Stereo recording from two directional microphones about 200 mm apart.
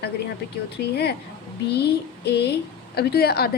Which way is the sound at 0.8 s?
55° left (ahead or behind).